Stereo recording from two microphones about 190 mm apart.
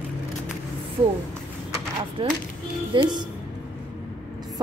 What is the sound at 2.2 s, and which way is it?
Speech, 25° right (ahead or behind).